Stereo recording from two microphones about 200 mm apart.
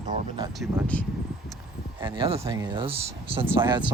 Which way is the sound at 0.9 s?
10° left (ahead or behind).